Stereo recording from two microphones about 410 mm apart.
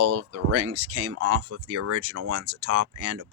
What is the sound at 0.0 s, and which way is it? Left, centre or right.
Speech, right.